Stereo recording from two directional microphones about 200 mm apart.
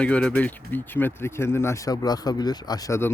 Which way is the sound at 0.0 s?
5° left (ahead or behind).